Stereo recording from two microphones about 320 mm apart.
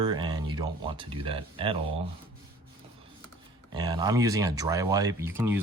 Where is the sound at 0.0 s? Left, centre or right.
Centre.